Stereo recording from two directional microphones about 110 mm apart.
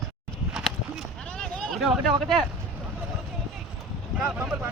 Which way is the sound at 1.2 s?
10° left (ahead or behind).